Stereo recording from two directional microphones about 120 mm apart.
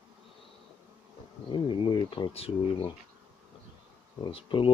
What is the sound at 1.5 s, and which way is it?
Speech, 40° left (ahead or behind).